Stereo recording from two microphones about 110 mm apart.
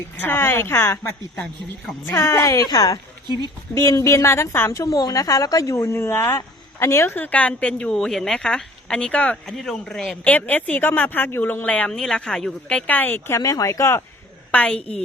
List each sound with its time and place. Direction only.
0.2 s speech: 20° left (ahead or behind)
2.0 s a woman's voice: 25° left (ahead or behind)
14.5 s a woman's voice: 10° left (ahead or behind)